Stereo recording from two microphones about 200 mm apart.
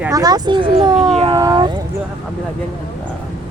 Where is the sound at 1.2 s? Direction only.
25° right (ahead or behind).